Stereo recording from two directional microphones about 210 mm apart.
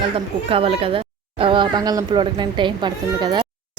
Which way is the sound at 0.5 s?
25° right (ahead or behind).